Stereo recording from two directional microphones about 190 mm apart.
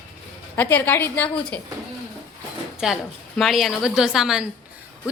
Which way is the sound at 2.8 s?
Centre (ahead or behind).